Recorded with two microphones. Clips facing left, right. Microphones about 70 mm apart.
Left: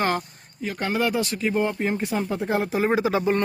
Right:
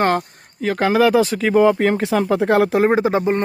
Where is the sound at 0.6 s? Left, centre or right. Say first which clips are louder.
Right 9 dB; right.